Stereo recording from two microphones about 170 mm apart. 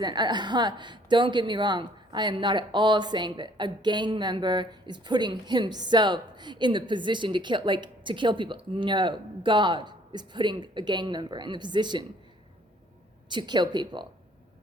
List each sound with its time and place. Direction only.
0.0 s a woman's voice: 25° right (ahead or behind)
13.2 s a woman's voice: 25° right (ahead or behind)